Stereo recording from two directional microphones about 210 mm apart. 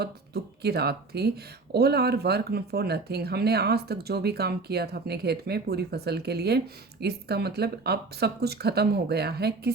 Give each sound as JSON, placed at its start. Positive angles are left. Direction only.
{"t": 0.0, "sound": "speech", "side_deg": -50}